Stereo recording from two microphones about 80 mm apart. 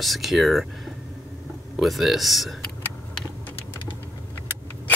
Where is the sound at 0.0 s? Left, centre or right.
Centre.